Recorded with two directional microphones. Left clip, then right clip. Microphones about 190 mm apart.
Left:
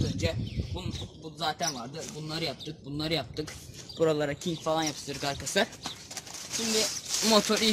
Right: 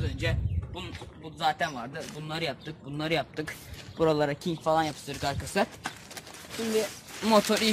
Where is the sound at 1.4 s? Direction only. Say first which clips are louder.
Right 3 dB; 10° right (ahead or behind).